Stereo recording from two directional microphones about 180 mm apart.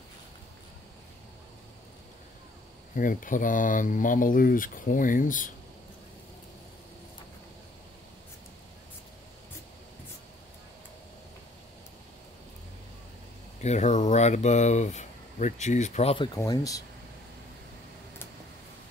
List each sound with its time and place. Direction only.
3.0 s speech: 50° left (ahead or behind)
13.6 s speech: 40° left (ahead or behind)
16.3 s speech: 20° left (ahead or behind)